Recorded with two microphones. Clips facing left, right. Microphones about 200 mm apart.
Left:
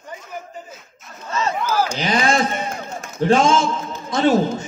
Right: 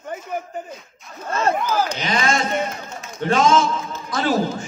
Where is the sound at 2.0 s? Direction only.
35° left (ahead or behind).